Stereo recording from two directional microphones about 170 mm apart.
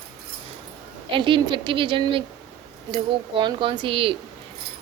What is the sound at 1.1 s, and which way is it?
A woman's voice, 30° right (ahead or behind).